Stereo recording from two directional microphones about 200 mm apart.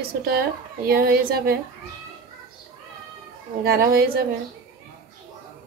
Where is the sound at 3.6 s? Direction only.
50° right (ahead or behind).